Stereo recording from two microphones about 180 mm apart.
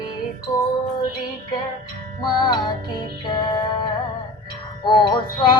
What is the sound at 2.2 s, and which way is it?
Music, 25° left (ahead or behind).